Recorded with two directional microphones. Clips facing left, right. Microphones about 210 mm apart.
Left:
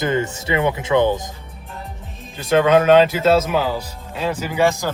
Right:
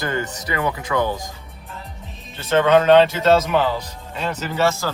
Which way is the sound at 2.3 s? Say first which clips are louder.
Left 1 dB; 10° left (ahead or behind).